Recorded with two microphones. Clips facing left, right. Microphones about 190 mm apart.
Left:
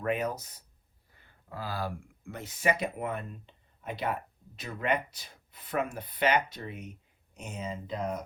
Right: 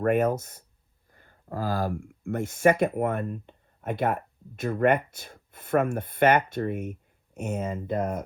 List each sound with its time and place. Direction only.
0.0 s speech: 50° right (ahead or behind)